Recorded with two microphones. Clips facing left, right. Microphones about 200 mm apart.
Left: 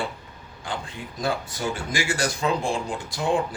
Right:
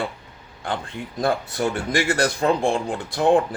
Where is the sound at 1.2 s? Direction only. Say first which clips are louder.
Right 5 dB; 60° right (ahead or behind).